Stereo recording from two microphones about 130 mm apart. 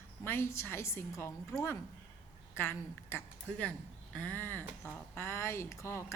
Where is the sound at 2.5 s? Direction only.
20° left (ahead or behind).